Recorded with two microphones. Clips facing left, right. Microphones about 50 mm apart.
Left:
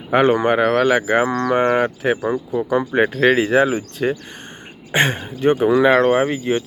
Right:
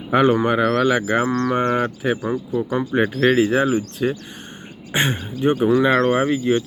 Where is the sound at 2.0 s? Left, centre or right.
Left.